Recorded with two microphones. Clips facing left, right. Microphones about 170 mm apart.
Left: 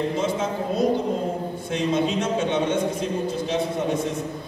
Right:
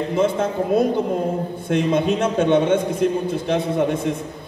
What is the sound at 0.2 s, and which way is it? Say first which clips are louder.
A man's voice: right 5 dB; 55° right (ahead or behind).